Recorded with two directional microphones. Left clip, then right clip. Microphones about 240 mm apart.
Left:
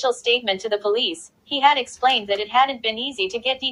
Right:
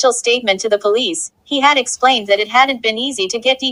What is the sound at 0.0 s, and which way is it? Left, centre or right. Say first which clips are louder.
A woman's voice: right 6 dB; right.